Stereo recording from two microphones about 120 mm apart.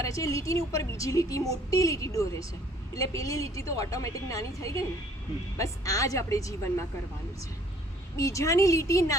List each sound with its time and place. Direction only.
0.0 s a woman's voice: 25° left (ahead or behind)
8.1 s a woman's voice: 25° left (ahead or behind)